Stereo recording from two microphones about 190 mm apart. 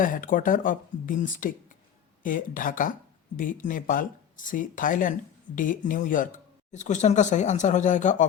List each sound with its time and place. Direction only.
0.0 s speech: 45° left (ahead or behind)